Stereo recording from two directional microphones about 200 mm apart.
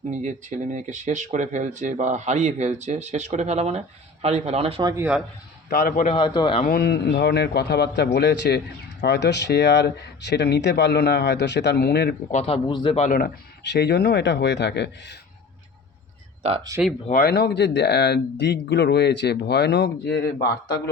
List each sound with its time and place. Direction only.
0.1 s speech: 35° right (ahead or behind); by 5.0 s 20° right (ahead or behind)
5.6 s a man's voice: 50° left (ahead or behind)
6.1 s speech: 25° left (ahead or behind)
6.6 s a man's voice: 45° left (ahead or behind)
12.3 s speech: 30° left (ahead or behind)
13.1 s a man's voice: 45° left (ahead or behind)
17.1 s a man's voice: 50° left (ahead or behind)
20.4 s speech: 20° left (ahead or behind)